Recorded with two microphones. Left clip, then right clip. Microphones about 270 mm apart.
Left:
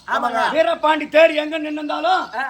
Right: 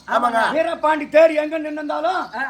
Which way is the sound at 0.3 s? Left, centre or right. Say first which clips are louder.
Right 1 dB; centre.